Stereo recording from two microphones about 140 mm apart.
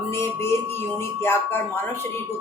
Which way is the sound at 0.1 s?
20° left (ahead or behind).